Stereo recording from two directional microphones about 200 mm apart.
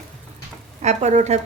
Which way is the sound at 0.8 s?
35° right (ahead or behind).